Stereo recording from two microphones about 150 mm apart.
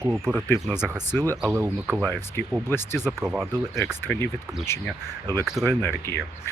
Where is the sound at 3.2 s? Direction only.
10° right (ahead or behind).